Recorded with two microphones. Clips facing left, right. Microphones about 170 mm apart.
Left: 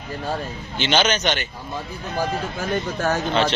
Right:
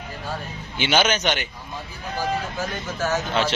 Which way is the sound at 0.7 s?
10° right (ahead or behind).